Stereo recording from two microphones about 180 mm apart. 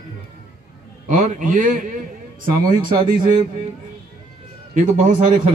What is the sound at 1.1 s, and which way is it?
A man's voice, 45° right (ahead or behind).